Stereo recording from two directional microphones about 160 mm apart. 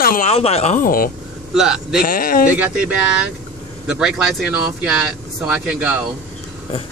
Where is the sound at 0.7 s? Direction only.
60° left (ahead or behind).